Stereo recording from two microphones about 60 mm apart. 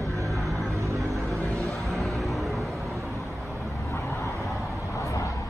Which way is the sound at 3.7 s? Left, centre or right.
Left.